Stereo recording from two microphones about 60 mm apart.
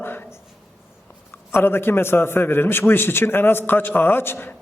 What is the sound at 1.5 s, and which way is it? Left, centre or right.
A man's voice, left.